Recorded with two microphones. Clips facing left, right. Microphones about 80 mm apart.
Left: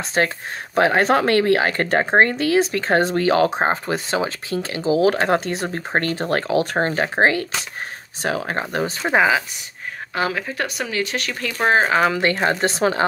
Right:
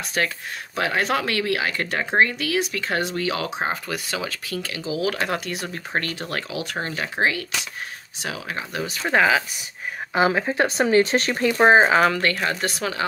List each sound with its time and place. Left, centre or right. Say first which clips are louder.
0.0 s a woman's voice: left 4 dB; left
9.0 s speech: left 1 dB; centre
10.1 s speech: right 4 dB; right
11.5 s speech: right 2 dB; right
11.9 s speech: even; centre
12.2 s a woman's voice: left 4 dB; left